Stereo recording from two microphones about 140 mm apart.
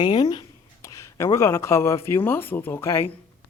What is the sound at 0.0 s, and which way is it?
Speech, 35° left (ahead or behind).